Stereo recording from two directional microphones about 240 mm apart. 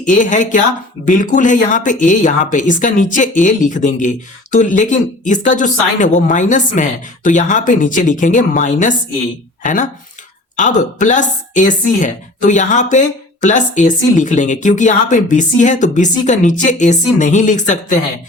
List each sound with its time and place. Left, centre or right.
0.0 s a woman's voice: left
10.6 s a woman's voice: left